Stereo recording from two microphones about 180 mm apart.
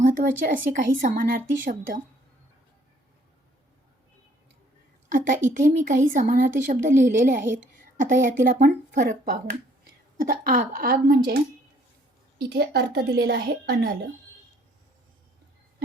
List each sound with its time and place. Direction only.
0.1 s a woman's voice: 45° right (ahead or behind)
5.1 s a woman's voice: 45° right (ahead or behind)
12.4 s a woman's voice: 70° right (ahead or behind)